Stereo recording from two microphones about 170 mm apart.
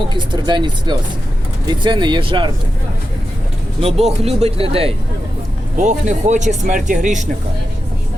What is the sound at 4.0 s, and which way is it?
Speech, 40° right (ahead or behind).